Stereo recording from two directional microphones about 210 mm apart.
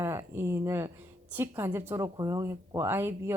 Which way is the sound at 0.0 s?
10° right (ahead or behind).